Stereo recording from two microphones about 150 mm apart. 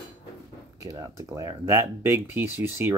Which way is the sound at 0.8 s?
20° right (ahead or behind).